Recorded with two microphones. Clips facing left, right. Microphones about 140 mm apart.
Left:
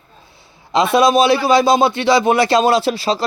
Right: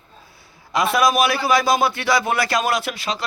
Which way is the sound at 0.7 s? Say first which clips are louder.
Left 5 dB; 25° left (ahead or behind).